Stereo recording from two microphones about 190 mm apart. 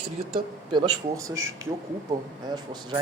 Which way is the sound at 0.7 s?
20° right (ahead or behind).